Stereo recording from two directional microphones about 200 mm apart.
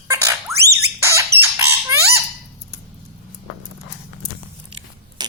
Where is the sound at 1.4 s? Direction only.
15° right (ahead or behind).